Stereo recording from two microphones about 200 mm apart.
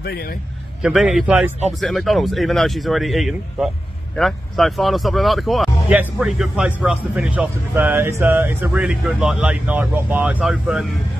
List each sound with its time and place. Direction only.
0.0 s a man's voice: 50° left (ahead or behind)
0.8 s speech: centre (ahead or behind)